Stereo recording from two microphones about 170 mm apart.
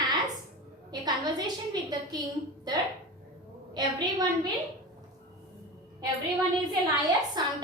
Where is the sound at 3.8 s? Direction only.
25° right (ahead or behind).